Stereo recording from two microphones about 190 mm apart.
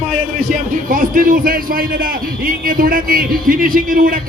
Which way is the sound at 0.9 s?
45° right (ahead or behind).